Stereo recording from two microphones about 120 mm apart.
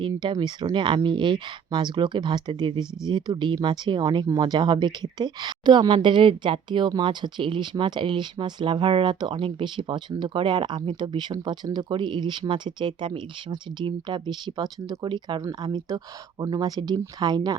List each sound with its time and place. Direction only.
0.0 s speech: 40° right (ahead or behind)